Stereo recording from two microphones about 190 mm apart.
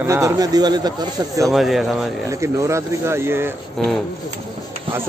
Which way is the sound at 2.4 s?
15° right (ahead or behind).